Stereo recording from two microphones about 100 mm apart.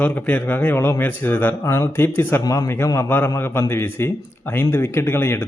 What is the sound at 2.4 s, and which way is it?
A man's voice, 35° left (ahead or behind).